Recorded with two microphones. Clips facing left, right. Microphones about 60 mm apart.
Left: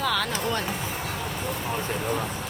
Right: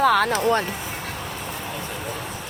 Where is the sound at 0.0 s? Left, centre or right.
Right.